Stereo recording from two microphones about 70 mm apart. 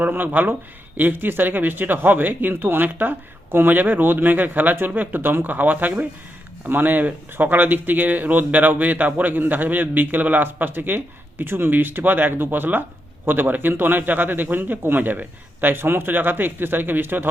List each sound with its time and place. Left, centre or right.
0.0 s speech: right